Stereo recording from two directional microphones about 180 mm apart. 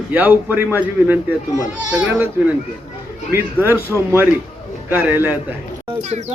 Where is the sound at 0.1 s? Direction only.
10° right (ahead or behind).